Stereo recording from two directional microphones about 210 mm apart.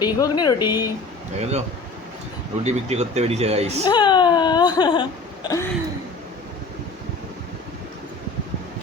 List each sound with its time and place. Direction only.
0.0 s speech: 20° left (ahead or behind)
1.4 s speech: 30° right (ahead or behind)
2.6 s speech: 30° right (ahead or behind)
3.8 s speech: 20° left (ahead or behind)